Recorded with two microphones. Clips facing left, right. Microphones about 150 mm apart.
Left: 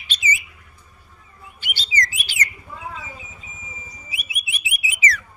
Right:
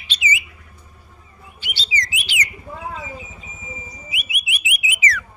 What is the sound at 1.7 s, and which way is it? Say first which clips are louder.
Bird: left 1 dB; 45° left (ahead or behind).